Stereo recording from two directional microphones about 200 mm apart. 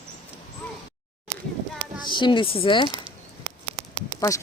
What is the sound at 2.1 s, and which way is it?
Speech, 25° left (ahead or behind).